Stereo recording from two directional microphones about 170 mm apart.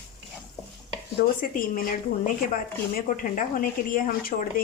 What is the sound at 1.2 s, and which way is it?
Speech, 55° left (ahead or behind).